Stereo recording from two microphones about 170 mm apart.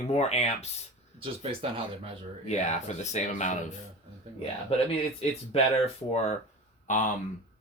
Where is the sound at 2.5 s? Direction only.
40° left (ahead or behind).